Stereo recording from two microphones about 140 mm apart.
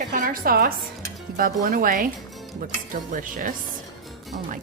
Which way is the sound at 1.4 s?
75° right (ahead or behind).